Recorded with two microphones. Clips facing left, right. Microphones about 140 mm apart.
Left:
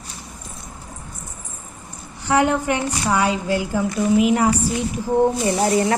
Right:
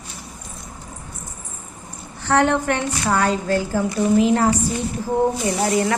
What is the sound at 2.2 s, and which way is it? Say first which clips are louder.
A woman's voice: even; 10° left (ahead or behind).